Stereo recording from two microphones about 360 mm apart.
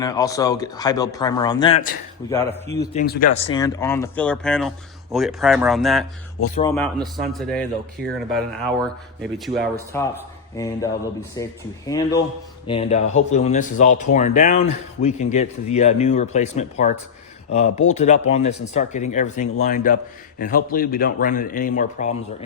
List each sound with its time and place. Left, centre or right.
0.0 s speech: centre
2.6 s speech: centre
2.9 s a man's voice: left; by 6.1 s centre
6.4 s speech: centre
6.7 s a man's voice: centre